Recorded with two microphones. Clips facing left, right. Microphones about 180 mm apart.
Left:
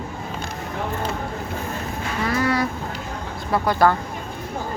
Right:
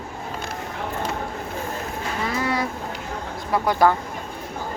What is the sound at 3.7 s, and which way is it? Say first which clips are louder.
Speech: even; 15° right (ahead or behind).